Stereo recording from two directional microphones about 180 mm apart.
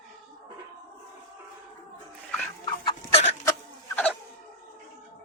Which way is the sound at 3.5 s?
10° left (ahead or behind).